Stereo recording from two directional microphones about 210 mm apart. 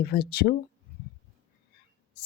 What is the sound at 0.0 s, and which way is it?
Speech, 50° left (ahead or behind).